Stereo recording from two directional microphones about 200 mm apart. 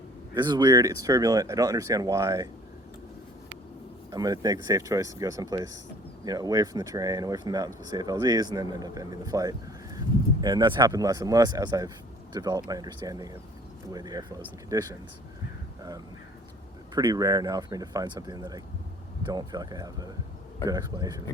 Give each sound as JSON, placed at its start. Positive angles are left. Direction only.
{"t": 0.3, "sound": "speech", "side_deg": -20}
{"t": 4.1, "sound": "speech", "side_deg": -20}
{"t": 16.9, "sound": "speech", "side_deg": -20}